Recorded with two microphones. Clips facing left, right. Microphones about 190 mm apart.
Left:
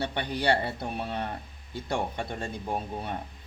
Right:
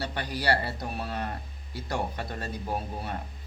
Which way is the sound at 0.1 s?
25° left (ahead or behind).